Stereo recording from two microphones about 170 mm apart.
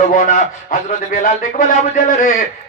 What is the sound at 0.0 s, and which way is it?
Speech, 55° left (ahead or behind).